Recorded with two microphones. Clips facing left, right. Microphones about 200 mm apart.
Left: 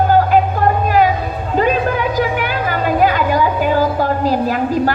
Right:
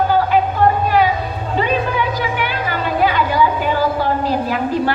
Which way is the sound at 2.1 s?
45° left (ahead or behind).